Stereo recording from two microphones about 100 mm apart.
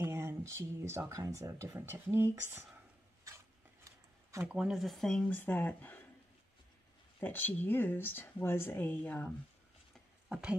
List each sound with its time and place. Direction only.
0.0 s speech: 25° right (ahead or behind)
4.5 s speech: 5° right (ahead or behind)
5.3 s speech: 20° left (ahead or behind)
7.2 s speech: 20° left (ahead or behind)